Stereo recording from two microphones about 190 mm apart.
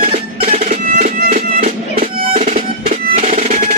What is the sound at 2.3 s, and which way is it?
Percussion, 40° right (ahead or behind).